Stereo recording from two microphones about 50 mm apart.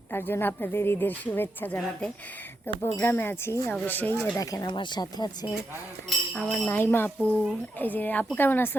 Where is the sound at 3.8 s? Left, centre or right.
Left.